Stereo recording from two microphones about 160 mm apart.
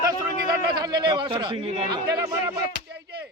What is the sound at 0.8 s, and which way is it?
A man's voice, 25° right (ahead or behind).